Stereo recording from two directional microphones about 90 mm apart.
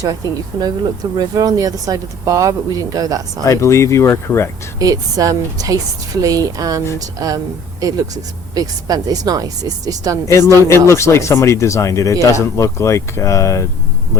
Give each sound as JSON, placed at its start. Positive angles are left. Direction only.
{"t": 0.5, "sound": "speech", "side_deg": -50}
{"t": 3.4, "sound": "speech", "side_deg": 35}
{"t": 4.8, "sound": "a woman's voice", "side_deg": -40}
{"t": 10.2, "sound": "speech", "side_deg": 30}